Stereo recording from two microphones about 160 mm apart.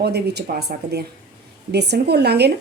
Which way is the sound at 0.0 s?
90° right.